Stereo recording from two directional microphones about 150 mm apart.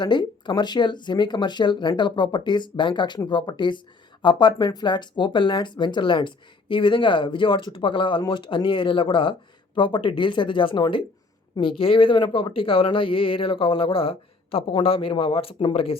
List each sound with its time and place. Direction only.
0.0 s speech: 30° left (ahead or behind)